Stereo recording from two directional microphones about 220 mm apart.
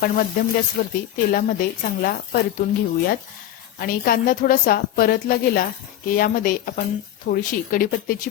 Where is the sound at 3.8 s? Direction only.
40° left (ahead or behind).